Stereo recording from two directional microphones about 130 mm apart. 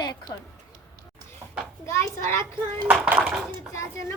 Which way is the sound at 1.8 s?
20° left (ahead or behind).